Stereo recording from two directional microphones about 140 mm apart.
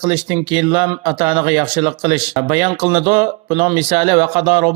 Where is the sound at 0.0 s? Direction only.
35° right (ahead or behind).